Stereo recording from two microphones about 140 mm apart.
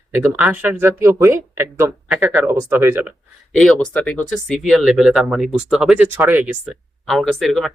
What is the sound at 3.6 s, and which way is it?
Speech, 5° left (ahead or behind).